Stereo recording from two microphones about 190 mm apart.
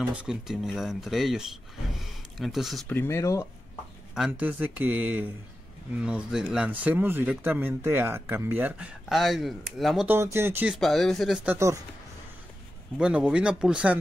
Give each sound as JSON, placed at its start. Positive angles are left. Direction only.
{"t": 0.1, "sound": "speech", "side_deg": -5}
{"t": 3.0, "sound": "speech", "side_deg": 15}
{"t": 4.1, "sound": "speech", "side_deg": -5}
{"t": 10.0, "sound": "speech", "side_deg": -15}
{"t": 10.7, "sound": "speech", "side_deg": 0}
{"t": 12.9, "sound": "speech", "side_deg": -5}